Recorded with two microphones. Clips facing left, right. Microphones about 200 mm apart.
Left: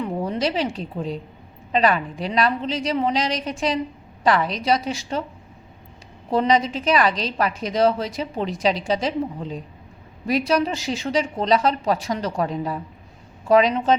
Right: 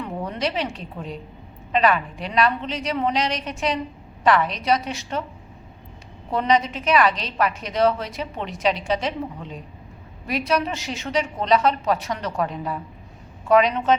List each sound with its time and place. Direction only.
0.0 s a woman's voice: 30° left (ahead or behind)
4.3 s a woman's voice: 35° left (ahead or behind)
6.3 s a woman's voice: 35° left (ahead or behind)